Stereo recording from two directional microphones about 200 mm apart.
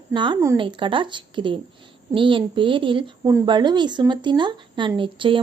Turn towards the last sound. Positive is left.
turn(degrees=-25)  # may be behind; listen again after turning